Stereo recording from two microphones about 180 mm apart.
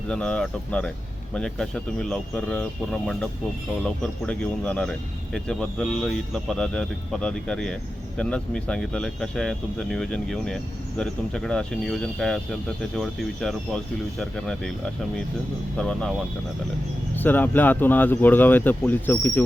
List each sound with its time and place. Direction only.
0.1 s speech: 5° left (ahead or behind)
15.8 s speech: 5° left (ahead or behind)
17.2 s speech: 10° left (ahead or behind)